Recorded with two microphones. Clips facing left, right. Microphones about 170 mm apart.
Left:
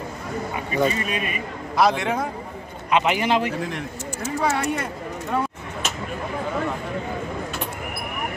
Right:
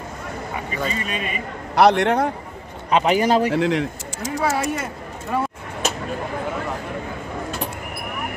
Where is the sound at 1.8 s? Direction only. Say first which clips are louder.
Right 5 dB; 65° right (ahead or behind).